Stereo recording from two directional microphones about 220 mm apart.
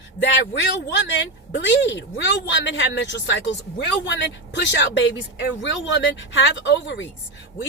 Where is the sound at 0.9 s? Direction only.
50° left (ahead or behind).